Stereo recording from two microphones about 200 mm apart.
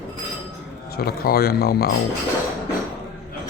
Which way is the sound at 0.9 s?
50° left (ahead or behind).